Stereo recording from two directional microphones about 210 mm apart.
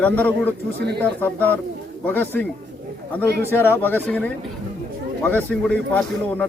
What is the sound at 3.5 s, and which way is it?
A man's voice, 10° left (ahead or behind).